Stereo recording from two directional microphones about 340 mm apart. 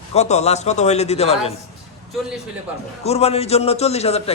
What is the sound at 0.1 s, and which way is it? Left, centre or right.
A man's voice, centre.